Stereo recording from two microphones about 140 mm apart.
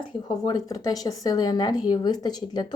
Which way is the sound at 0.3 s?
25° left (ahead or behind).